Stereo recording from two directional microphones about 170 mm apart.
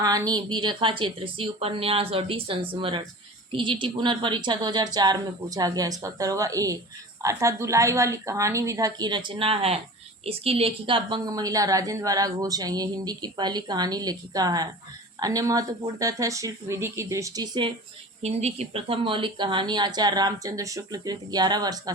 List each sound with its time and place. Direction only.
0.0 s a woman's voice: 20° right (ahead or behind)
18.2 s a woman's voice: 40° right (ahead or behind); by 21.9 s 25° right (ahead or behind)